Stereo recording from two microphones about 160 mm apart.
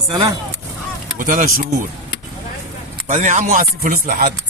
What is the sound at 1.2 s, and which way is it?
Speech, 60° right (ahead or behind).